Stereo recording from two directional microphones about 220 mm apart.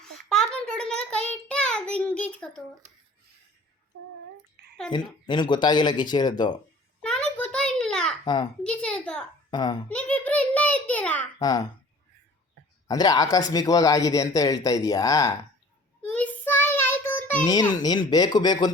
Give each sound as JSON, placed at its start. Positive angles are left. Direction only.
{"t": 0.0, "sound": "child singing", "side_deg": 5}
{"t": 4.9, "sound": "speech", "side_deg": 20}
{"t": 7.0, "sound": "a sound", "side_deg": 5}
{"t": 8.2, "sound": "a child's voice", "side_deg": 20}
{"t": 8.6, "sound": "a sound", "side_deg": 5}
{"t": 9.5, "sound": "a child's voice", "side_deg": 20}
{"t": 9.9, "sound": "a sound", "side_deg": 5}
{"t": 11.3, "sound": "speech", "side_deg": 15}
{"t": 12.9, "sound": "speech", "side_deg": 15}
{"t": 16.1, "sound": "child singing", "side_deg": 5}